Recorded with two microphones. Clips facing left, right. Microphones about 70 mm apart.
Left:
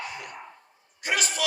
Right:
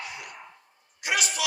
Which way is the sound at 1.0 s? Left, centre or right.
Left.